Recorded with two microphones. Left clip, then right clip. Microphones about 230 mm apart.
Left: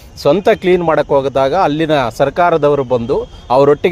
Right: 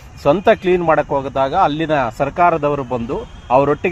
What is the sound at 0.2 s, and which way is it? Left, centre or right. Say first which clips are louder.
Speech: left 2 dB; left.